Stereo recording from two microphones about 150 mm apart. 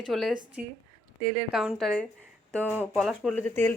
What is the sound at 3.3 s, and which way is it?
Speech, 10° left (ahead or behind).